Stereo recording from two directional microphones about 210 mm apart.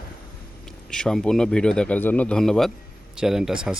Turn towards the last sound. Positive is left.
turn(degrees=-5)  # may be behind; listen again after turning